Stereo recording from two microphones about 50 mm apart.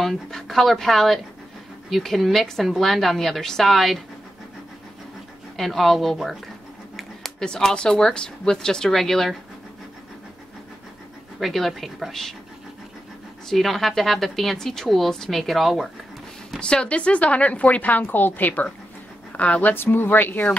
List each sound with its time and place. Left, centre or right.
0.0 s a woman's voice: centre
5.6 s a woman's voice: centre
7.0 s a sound: centre
7.4 s a woman's voice: centre
11.3 s a woman's voice: centre
13.5 s a woman's voice: centre
16.5 s a woman's voice: centre
19.7 s speech: left